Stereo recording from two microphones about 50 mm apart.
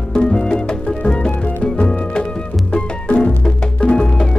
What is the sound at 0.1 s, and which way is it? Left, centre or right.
Music, centre.